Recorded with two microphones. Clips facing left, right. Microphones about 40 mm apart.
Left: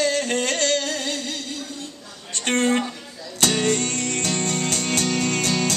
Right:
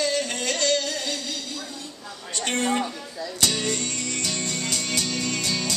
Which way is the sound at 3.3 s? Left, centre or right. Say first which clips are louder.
Left 5 dB; left.